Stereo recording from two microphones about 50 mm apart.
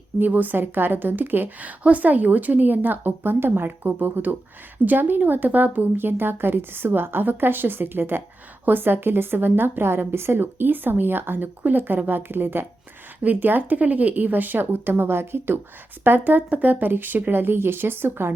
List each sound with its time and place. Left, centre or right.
0.2 s a woman's voice: right